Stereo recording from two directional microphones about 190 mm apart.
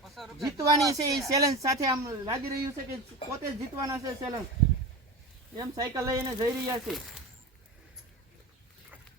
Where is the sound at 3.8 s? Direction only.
15° right (ahead or behind).